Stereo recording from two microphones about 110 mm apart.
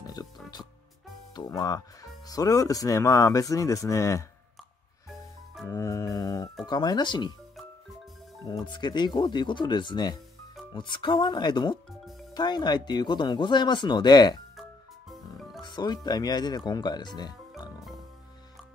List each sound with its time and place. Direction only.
0.0 s music: 35° left (ahead or behind)
1.3 s speech: 35° left (ahead or behind)
5.7 s mantra: 30° left (ahead or behind)
6.6 s speech: 40° left (ahead or behind)
8.6 s speech: 45° left (ahead or behind)
14.6 s music: centre (ahead or behind)
15.6 s speech: 40° left (ahead or behind)